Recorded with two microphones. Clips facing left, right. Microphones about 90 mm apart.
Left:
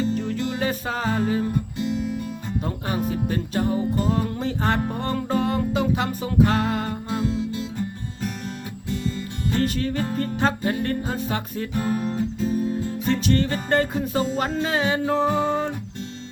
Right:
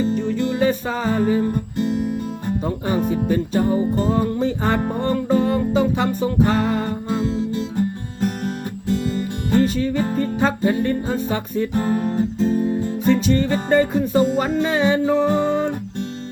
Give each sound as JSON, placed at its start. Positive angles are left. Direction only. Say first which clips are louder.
{"t": 0.1, "sound": "music", "louder": "right 4 dB", "side_deg": 0}
{"t": 3.2, "sound": "music", "louder": "right 6 dB", "side_deg": -5}
{"t": 3.7, "sound": "music", "louder": "right 4 dB", "side_deg": -35}
{"t": 4.4, "sound": "music", "louder": "right 4 dB", "side_deg": 0}
{"t": 7.1, "sound": "music", "louder": "right 3 dB", "side_deg": -25}
{"t": 9.6, "sound": "music", "louder": "right 6 dB", "side_deg": 0}
{"t": 11.7, "sound": "music", "louder": "right 2 dB", "side_deg": -30}
{"t": 13.1, "sound": "music", "louder": "right 5 dB", "side_deg": 0}